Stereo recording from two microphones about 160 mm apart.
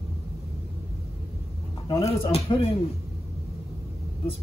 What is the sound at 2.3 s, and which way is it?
Speech, 40° left (ahead or behind).